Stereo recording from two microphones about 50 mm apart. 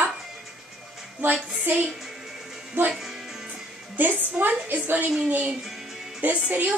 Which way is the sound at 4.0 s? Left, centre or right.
Right.